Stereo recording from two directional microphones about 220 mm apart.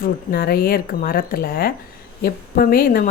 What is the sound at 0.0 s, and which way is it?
A woman's voice, 40° left (ahead or behind).